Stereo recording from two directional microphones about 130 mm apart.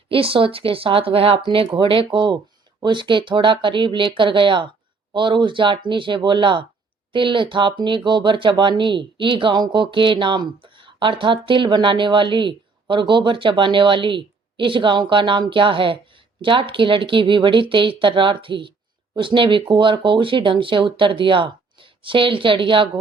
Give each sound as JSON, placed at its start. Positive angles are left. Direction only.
{"t": 0.1, "sound": "speech", "side_deg": -45}